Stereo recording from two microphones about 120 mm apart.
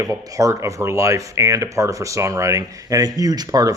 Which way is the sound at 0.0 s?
30° right (ahead or behind).